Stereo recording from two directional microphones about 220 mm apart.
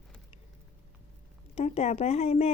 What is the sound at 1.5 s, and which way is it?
Speech, 30° left (ahead or behind).